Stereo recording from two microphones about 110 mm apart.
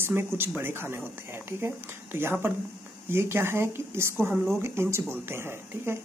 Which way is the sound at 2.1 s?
20° right (ahead or behind).